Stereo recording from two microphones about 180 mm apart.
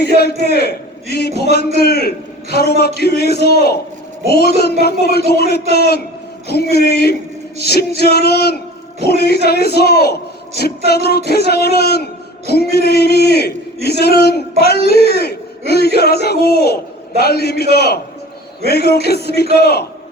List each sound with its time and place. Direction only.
0.0 s a man's voice: 60° left (ahead or behind)